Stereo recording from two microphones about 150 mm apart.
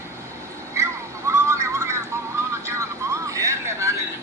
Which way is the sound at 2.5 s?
20° right (ahead or behind).